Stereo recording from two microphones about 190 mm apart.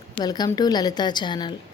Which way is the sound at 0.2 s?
20° left (ahead or behind).